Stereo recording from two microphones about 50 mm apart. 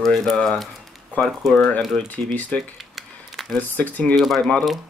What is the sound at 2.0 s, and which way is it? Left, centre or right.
Speech, left.